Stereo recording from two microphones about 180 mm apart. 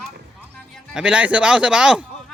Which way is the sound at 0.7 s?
5° right (ahead or behind).